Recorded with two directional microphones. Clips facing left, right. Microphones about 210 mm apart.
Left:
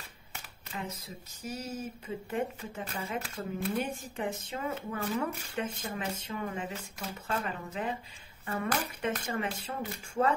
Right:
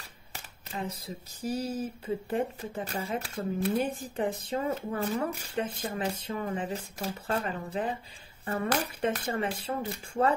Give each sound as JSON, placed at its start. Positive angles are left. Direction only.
{"t": 0.3, "sound": "speech", "side_deg": -35}